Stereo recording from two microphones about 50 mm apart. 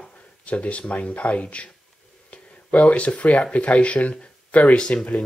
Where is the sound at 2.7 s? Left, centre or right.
Left.